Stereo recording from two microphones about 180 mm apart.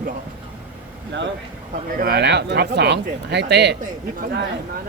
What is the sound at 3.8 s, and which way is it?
Speech, 50° right (ahead or behind).